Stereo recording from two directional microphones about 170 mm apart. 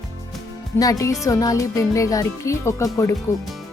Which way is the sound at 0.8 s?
20° left (ahead or behind).